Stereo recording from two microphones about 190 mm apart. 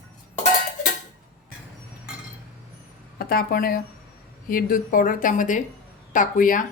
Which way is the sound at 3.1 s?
50° left (ahead or behind).